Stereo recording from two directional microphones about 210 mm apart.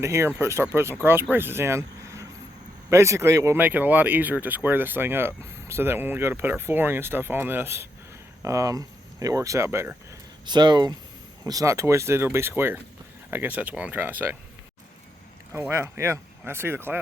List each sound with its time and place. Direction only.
0.0 s speech: 10° right (ahead or behind)
15.5 s speech: 10° right (ahead or behind)